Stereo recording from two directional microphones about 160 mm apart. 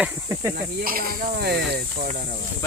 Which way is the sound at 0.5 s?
65° right (ahead or behind).